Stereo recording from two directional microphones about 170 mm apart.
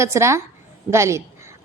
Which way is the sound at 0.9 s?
15° right (ahead or behind).